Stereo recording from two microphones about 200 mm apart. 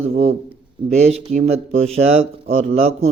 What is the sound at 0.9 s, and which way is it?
Speech, 30° right (ahead or behind).